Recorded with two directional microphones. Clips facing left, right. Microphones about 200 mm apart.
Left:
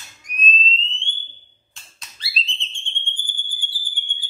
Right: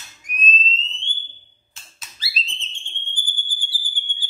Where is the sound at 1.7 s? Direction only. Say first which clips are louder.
Even; 5° right (ahead or behind).